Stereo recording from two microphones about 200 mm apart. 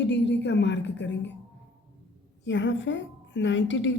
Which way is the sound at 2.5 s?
65° left (ahead or behind).